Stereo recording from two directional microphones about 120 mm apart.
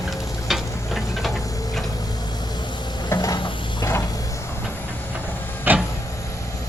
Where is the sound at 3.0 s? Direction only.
30° left (ahead or behind).